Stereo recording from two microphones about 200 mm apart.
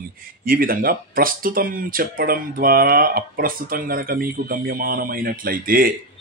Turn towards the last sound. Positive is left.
turn(degrees=-45)  # may be behind; listen again after turning